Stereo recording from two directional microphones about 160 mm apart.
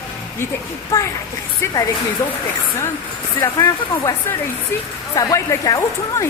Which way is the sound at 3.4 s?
20° left (ahead or behind).